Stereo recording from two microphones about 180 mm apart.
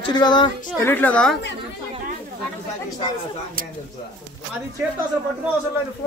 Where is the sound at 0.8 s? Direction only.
10° left (ahead or behind).